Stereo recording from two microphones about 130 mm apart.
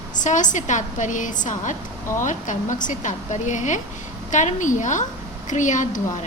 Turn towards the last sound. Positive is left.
turn(degrees=75)  # may be behind; listen again after turning